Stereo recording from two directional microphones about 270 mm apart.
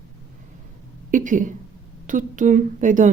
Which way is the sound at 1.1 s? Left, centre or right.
Right.